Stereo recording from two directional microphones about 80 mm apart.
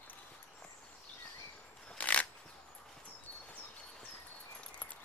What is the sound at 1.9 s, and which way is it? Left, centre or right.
Shuffling cards, centre.